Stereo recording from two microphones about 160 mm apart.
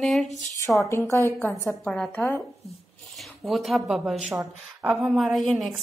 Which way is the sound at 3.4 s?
Centre (ahead or behind).